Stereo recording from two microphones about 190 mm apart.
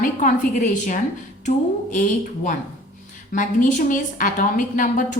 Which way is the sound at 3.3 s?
45° left (ahead or behind).